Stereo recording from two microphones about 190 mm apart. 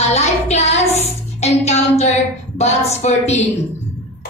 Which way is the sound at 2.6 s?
35° left (ahead or behind).